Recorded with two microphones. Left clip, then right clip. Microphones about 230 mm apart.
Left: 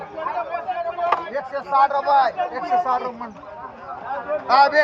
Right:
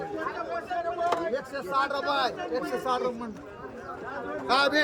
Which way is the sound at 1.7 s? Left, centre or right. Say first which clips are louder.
Left 10 dB; centre.